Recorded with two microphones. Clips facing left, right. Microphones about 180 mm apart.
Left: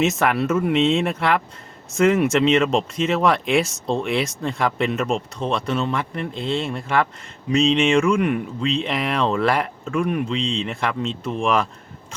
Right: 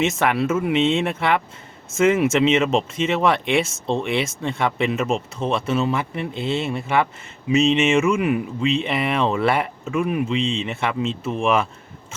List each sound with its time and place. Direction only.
0.0 s speech: centre (ahead or behind)